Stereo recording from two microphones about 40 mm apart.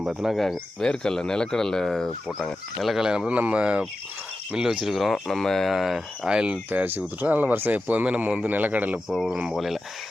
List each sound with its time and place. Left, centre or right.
0.0 s speech: centre
0.3 s speech: centre
0.8 s speech: centre
3.0 s speech: right
3.2 s speech: right
4.5 s speech: centre
4.9 s speech: centre
5.7 s speech: centre
6.2 s speech: right
6.8 s speech: right
9.6 s speech: centre